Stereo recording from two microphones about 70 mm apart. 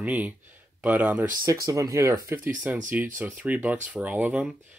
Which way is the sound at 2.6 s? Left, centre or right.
Right.